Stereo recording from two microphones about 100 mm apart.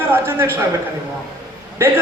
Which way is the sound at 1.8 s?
25° right (ahead or behind).